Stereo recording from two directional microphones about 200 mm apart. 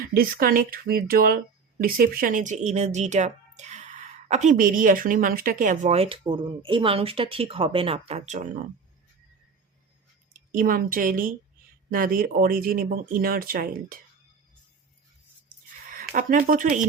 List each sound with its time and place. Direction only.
0.0 s speech: 45° right (ahead or behind)
10.3 s a woman's voice: 40° right (ahead or behind)
15.9 s speech: 40° right (ahead or behind)